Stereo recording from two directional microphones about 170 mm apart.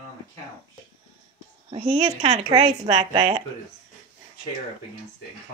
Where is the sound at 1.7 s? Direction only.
40° right (ahead or behind).